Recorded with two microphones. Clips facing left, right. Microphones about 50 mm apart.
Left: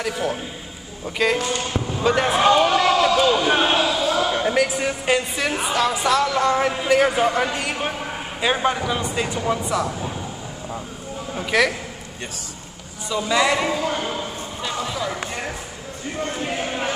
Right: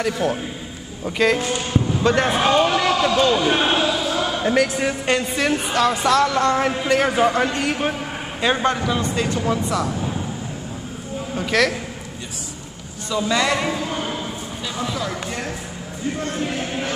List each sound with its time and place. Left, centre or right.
0.0 s a man's voice: centre
11.3 s speech: centre
13.1 s speech: centre
14.9 s a sound: centre